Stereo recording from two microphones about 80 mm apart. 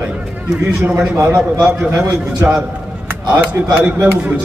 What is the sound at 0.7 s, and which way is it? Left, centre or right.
A man's voice, centre.